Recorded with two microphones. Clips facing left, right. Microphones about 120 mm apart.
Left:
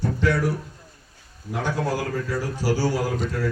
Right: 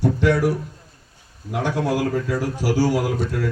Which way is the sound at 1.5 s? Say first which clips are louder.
Right 3 dB; 10° right (ahead or behind).